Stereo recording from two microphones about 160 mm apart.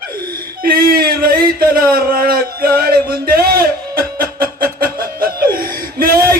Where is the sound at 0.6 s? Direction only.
65° right (ahead or behind).